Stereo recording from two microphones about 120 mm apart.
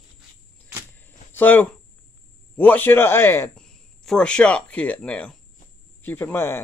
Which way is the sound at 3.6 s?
5° left (ahead or behind).